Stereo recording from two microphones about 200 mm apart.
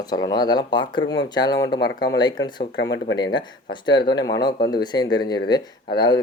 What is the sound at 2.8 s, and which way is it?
Speech, 60° left (ahead or behind).